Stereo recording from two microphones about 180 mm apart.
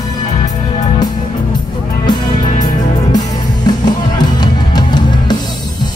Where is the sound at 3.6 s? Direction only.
25° left (ahead or behind).